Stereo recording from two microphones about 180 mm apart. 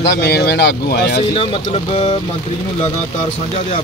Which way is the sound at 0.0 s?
65° left (ahead or behind).